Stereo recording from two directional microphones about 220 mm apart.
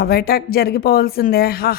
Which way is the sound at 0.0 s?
45° left (ahead or behind).